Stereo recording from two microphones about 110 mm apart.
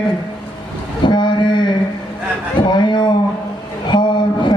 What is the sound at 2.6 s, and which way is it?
Speech, 45° left (ahead or behind).